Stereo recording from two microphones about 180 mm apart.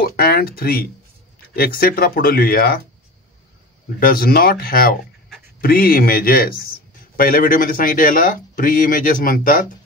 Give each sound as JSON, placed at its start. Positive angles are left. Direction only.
{"t": 0.1, "sound": "speech", "side_deg": 60}
{"t": 4.0, "sound": "speech", "side_deg": 55}